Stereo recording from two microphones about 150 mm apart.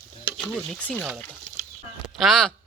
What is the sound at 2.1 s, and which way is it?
Speech, centre (ahead or behind).